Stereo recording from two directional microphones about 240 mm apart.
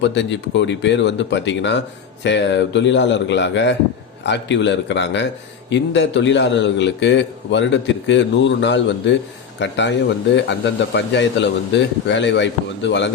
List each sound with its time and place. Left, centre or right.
0.0 s a man's voice: left